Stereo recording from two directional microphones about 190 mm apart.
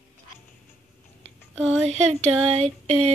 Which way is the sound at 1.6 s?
35° right (ahead or behind).